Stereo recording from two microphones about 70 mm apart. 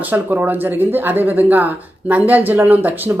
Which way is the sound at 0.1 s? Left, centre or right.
Right.